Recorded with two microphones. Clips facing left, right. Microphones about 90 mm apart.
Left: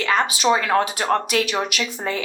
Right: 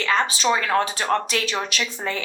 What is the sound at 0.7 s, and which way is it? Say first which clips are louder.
Speech: left 2 dB; 30° left (ahead or behind).